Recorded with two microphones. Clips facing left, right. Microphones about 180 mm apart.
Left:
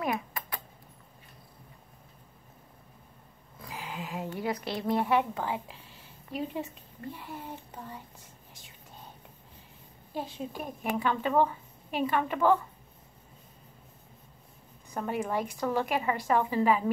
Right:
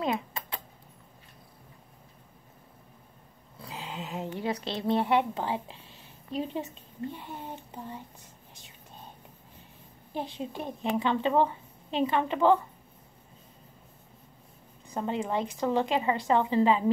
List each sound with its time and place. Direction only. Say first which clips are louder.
0.0 s a sound: right 2 dB; 25° right (ahead or behind)
3.5 s speech: right 1 dB; 25° right (ahead or behind)
7.1 s a woman's voice: left 2 dB; 20° right (ahead or behind)
10.1 s a woman's voice: right 1 dB; 25° right (ahead or behind)
15.0 s a woman's voice: right 1 dB; 20° right (ahead or behind)